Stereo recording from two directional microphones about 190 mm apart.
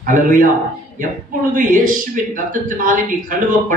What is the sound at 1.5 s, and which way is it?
A man's voice, 45° right (ahead or behind).